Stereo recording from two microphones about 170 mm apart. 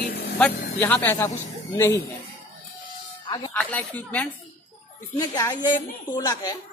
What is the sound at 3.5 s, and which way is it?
Speech, 5° left (ahead or behind).